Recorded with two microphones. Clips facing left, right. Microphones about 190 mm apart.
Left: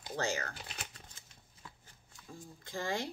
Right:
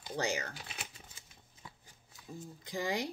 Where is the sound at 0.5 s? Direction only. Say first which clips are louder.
Even; 5° right (ahead or behind).